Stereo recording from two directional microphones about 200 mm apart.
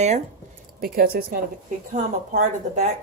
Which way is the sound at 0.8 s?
50° right (ahead or behind).